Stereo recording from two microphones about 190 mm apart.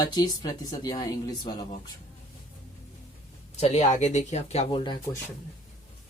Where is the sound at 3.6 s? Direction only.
35° left (ahead or behind).